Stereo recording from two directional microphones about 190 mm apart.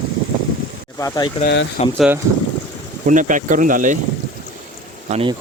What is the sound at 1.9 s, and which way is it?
Speech, 5° right (ahead or behind).